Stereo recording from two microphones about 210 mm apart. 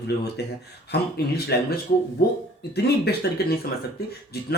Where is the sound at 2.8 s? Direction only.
50° left (ahead or behind).